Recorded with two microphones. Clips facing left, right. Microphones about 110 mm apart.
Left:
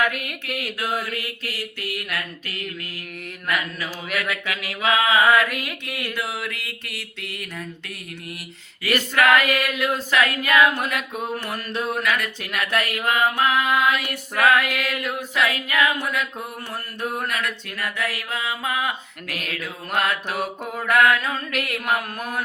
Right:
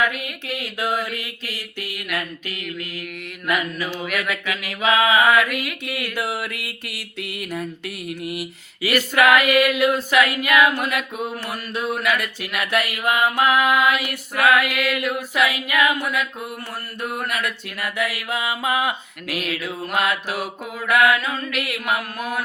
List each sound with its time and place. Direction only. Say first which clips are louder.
0.8 s mantra: right 4 dB; 20° right (ahead or behind)
3.8 s a sound: right 3 dB; 30° left (ahead or behind)
4.3 s mantra: right 2 dB; 20° right (ahead or behind)
5.8 s mantra: right 3 dB; 10° right (ahead or behind)
11.9 s mantra: right 1 dB; 10° right (ahead or behind)
14.5 s mantra: right 2 dB; 30° left (ahead or behind)
15.4 s mantra: right 1 dB; 10° right (ahead or behind)
17.2 s mantra: right 1 dB; 10° right (ahead or behind)
21.2 s mantra: even; 40° left (ahead or behind)